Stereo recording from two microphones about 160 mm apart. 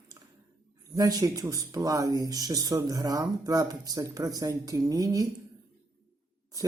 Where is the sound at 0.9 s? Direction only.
20° right (ahead or behind).